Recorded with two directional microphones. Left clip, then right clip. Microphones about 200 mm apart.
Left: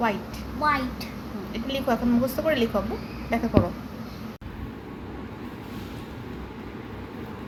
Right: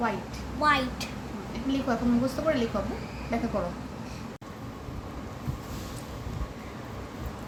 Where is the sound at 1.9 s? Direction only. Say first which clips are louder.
Left 5 dB; 30° left (ahead or behind).